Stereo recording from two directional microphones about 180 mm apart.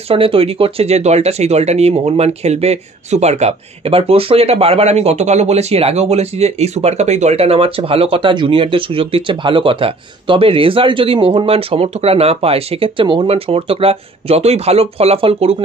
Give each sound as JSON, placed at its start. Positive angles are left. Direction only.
{"t": 0.1, "sound": "speech", "side_deg": -30}